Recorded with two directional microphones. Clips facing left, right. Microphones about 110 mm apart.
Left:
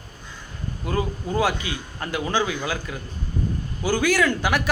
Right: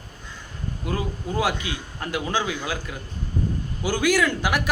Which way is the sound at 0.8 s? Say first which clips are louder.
Left 3 dB; 5° right (ahead or behind).